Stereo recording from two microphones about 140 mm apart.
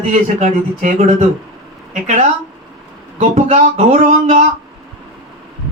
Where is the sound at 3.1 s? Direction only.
60° right (ahead or behind).